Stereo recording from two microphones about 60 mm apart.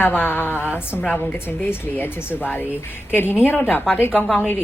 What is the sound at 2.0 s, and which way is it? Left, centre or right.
A woman's voice, left.